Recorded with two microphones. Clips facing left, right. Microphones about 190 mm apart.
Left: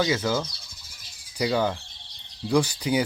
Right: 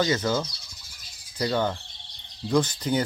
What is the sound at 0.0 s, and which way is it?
Speech, 5° left (ahead or behind).